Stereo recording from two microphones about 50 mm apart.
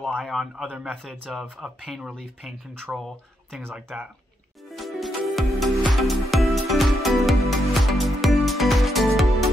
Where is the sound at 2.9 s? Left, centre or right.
Centre.